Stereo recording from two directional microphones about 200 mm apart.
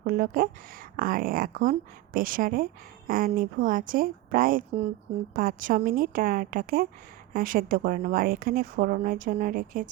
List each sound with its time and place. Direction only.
0.0 s speech: 45° right (ahead or behind)